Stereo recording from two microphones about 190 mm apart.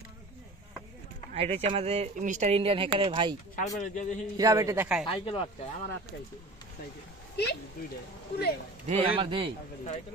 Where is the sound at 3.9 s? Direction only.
40° left (ahead or behind).